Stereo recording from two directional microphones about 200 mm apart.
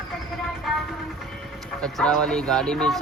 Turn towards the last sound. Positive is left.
turn(degrees=0)  # may be behind; listen again after turning